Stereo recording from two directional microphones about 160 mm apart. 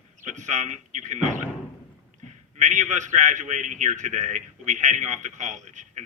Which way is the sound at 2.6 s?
50° right (ahead or behind).